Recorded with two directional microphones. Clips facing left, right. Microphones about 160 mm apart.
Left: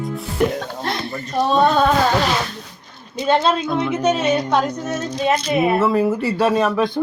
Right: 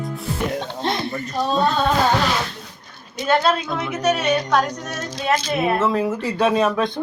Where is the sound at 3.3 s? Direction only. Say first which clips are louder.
Left 2 dB; 25° left (ahead or behind).